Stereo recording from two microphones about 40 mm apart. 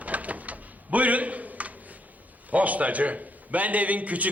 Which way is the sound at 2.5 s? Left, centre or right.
Right.